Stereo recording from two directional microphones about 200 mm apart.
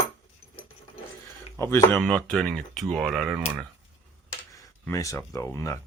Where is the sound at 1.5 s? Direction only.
15° left (ahead or behind).